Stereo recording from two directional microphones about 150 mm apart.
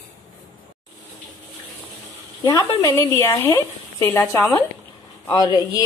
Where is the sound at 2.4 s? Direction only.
20° left (ahead or behind).